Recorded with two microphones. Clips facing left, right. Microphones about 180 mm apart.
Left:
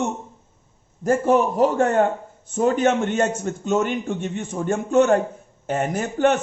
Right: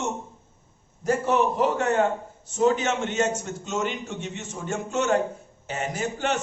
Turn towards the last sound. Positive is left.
turn(degrees=55)  # may be behind; listen again after turning